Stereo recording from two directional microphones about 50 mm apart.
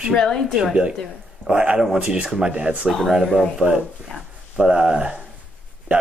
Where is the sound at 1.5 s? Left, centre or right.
Right.